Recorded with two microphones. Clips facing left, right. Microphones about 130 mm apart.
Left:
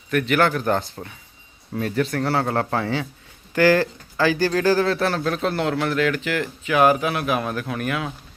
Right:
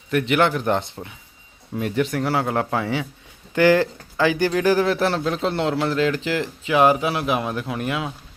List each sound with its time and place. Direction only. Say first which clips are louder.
0.1 s a man's voice: even; 20° right (ahead or behind)